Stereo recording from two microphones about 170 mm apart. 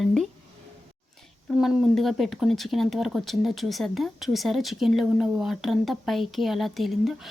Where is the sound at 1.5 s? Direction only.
Centre (ahead or behind).